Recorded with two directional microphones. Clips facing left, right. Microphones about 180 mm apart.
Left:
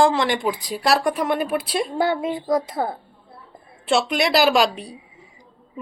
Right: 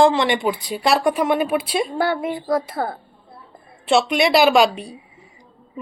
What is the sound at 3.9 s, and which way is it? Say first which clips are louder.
Speech: right 3 dB; centre (ahead or behind).